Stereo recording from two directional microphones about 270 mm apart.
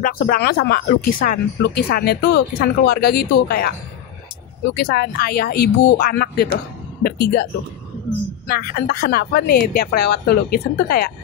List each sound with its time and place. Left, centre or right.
0.0 s speech: left
4.7 s speech: left
8.5 s speech: left